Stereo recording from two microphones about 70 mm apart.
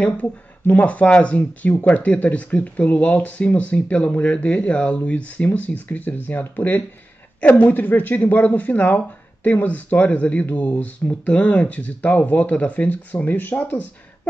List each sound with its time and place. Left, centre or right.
0.0 s speech: left